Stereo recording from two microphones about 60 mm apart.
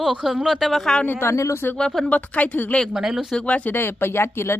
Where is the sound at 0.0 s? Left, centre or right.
Centre.